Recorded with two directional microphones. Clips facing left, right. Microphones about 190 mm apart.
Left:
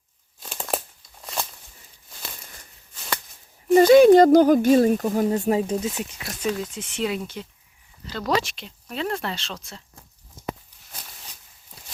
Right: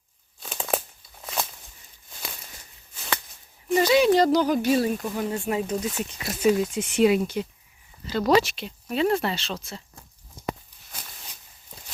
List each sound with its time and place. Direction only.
0.4 s a sound: centre (ahead or behind)
3.8 s speech: 50° left (ahead or behind); by 5.9 s 30° left (ahead or behind)
6.1 s speech: 5° right (ahead or behind)